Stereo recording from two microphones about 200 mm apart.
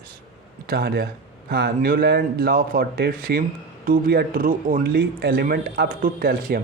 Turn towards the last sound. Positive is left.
turn(degrees=-45)  # may be behind; listen again after turning